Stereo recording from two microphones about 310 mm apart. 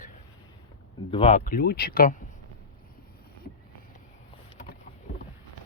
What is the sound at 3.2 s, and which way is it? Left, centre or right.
Boat, left.